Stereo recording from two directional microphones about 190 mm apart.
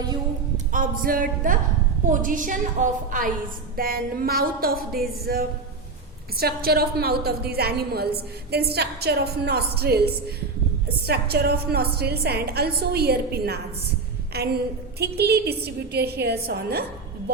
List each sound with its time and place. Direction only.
0.5 s a woman's voice: 45° right (ahead or behind)